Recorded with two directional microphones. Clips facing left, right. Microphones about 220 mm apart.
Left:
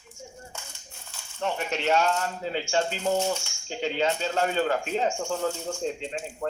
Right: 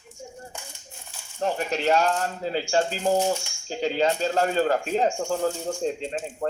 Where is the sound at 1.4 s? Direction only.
35° right (ahead or behind).